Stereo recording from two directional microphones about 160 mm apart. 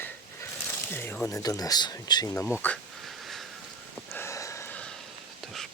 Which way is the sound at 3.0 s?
Centre (ahead or behind).